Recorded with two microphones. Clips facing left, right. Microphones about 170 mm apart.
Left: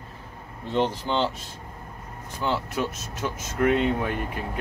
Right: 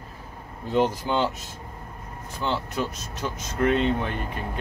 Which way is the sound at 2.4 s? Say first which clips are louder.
Left 1 dB; 5° left (ahead or behind).